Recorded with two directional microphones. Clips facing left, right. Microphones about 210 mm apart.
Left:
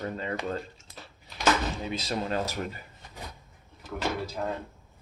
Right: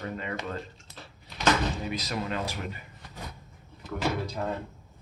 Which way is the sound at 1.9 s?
30° left (ahead or behind).